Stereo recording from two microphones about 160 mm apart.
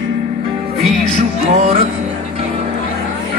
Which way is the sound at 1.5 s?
45° right (ahead or behind).